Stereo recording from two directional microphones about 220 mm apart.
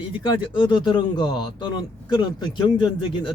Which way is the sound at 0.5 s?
20° left (ahead or behind).